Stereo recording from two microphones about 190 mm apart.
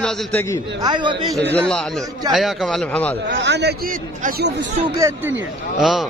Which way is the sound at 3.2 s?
65° right (ahead or behind).